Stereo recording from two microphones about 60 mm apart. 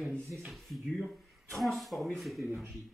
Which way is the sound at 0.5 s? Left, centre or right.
Centre.